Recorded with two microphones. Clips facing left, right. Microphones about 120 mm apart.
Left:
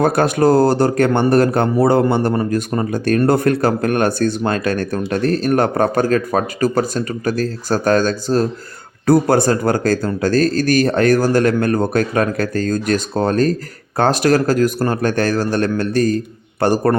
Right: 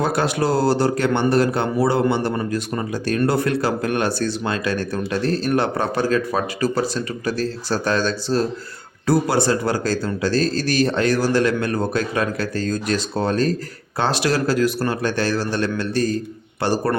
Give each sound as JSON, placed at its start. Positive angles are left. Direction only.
{"t": 0.0, "sound": "speech", "side_deg": 50}